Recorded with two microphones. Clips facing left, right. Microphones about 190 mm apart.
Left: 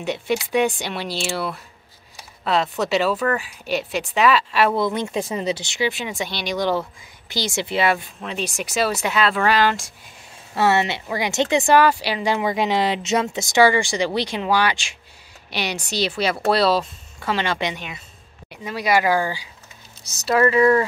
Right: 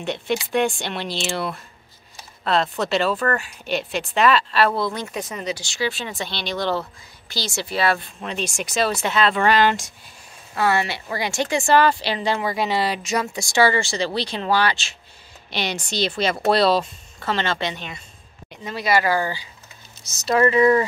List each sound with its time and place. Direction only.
0.0 s speech: 10° left (ahead or behind)
8.2 s speech: 5° left (ahead or behind)
10.5 s speech: 25° left (ahead or behind)
20.0 s speech: 35° left (ahead or behind)
20.2 s speech: centre (ahead or behind)